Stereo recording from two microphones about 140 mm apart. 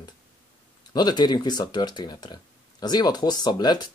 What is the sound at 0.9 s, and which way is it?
Speech, 30° left (ahead or behind).